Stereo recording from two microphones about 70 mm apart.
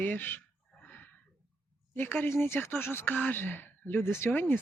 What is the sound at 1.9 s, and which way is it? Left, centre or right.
Speech, left.